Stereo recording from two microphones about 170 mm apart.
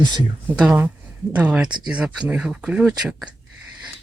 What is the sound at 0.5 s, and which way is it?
Speech, 5° right (ahead or behind).